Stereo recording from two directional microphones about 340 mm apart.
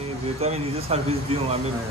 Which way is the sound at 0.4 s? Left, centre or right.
Centre.